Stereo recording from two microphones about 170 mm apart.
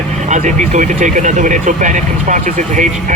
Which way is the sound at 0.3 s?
45° right (ahead or behind).